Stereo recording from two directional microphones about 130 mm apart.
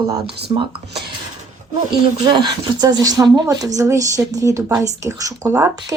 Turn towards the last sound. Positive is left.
turn(degrees=-25)  # may be behind; listen again after turning